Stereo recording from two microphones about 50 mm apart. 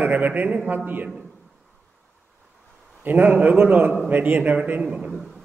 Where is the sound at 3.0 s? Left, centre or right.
Right.